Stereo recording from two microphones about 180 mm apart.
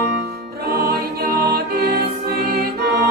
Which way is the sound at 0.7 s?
55° right (ahead or behind).